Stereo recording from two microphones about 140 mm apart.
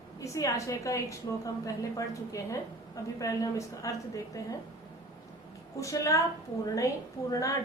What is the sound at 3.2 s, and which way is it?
A woman's voice, 25° left (ahead or behind).